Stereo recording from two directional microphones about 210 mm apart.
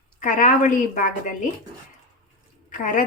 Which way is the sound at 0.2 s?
40° left (ahead or behind).